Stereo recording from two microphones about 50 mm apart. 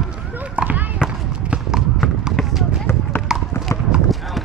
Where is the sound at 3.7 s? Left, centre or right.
Left.